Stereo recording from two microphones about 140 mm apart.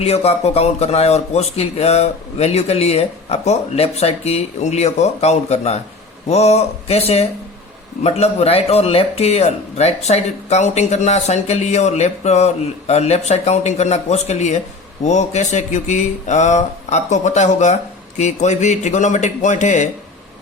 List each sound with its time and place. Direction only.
0.0 s a man's voice: 50° left (ahead or behind)